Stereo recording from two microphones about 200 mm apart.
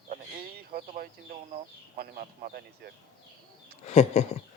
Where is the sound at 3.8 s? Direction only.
30° left (ahead or behind).